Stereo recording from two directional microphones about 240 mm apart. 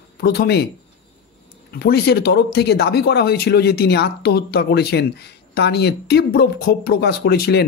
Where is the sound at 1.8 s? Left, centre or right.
Left.